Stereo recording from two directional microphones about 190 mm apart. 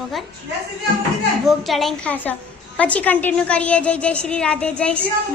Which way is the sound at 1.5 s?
Centre (ahead or behind).